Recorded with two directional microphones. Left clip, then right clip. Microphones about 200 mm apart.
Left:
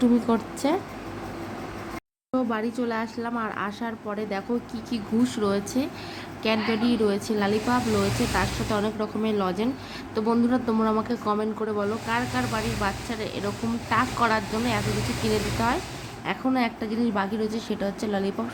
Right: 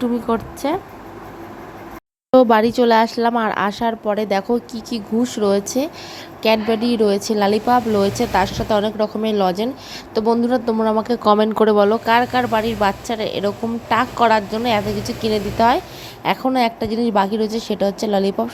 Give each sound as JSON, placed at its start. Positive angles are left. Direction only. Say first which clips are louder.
{"t": 0.0, "sound": "a woman's voice", "louder": "right 3 dB", "side_deg": -10}
{"t": 2.3, "sound": "a woman's voice", "louder": "right 15 dB", "side_deg": -40}